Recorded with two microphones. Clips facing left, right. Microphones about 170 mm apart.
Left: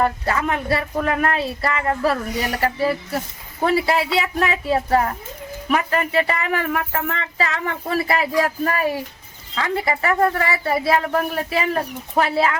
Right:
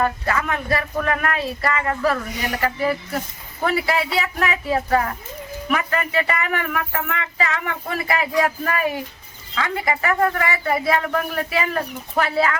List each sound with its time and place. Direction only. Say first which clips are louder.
0.0 s speech: left 1 dB; 30° left (ahead or behind)